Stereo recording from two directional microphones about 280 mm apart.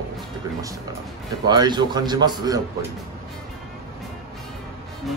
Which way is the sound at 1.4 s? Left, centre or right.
Centre.